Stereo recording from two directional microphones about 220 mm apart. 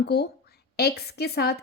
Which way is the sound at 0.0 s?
45° left (ahead or behind).